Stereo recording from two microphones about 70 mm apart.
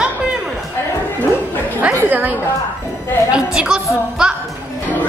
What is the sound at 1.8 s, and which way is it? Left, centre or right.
Chatter, right.